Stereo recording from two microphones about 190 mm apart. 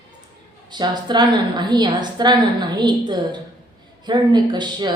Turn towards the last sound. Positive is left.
turn(degrees=-25)  # may be behind; listen again after turning